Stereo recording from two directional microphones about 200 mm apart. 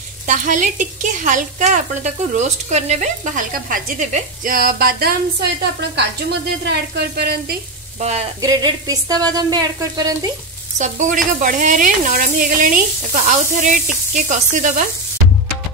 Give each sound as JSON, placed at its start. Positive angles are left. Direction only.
{"t": 0.3, "sound": "a woman's voice", "side_deg": -40}
{"t": 8.0, "sound": "a woman's voice", "side_deg": -30}
{"t": 8.4, "sound": "speech", "side_deg": -20}
{"t": 10.8, "sound": "a woman's voice", "side_deg": -40}